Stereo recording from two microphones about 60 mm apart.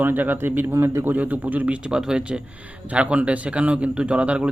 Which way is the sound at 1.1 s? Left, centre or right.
Right.